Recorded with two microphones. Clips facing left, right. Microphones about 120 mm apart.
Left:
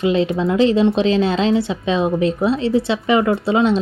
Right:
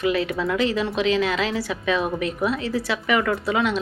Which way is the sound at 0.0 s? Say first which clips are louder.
Left 5 dB; 25° left (ahead or behind).